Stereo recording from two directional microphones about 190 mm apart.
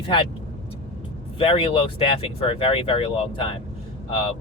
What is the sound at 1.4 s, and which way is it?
Speech, 30° left (ahead or behind).